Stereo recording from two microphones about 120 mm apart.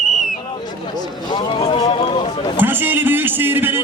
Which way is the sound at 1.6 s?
45° left (ahead or behind).